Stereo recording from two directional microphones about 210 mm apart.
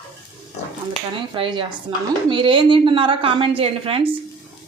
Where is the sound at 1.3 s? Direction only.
25° right (ahead or behind).